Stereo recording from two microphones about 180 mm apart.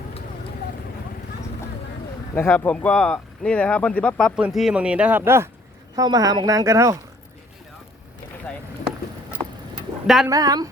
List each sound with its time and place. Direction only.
2.3 s speech: 10° left (ahead or behind); by 7.0 s 20° right (ahead or behind)
10.2 s speech: 20° right (ahead or behind)